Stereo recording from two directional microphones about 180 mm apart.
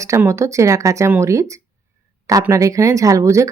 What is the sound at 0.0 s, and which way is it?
Speech, 15° right (ahead or behind).